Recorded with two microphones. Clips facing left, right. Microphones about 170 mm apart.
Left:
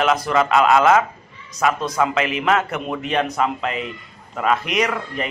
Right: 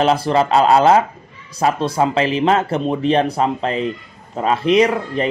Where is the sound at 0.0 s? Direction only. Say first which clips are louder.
Right 3 dB; 30° right (ahead or behind).